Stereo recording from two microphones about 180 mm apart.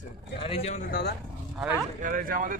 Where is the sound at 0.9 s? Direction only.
65° left (ahead or behind).